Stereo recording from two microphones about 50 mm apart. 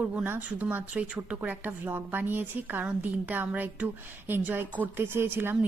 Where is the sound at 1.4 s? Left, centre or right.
Right.